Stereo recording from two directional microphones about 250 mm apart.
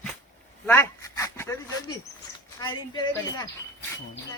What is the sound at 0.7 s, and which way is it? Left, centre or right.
Speech, centre.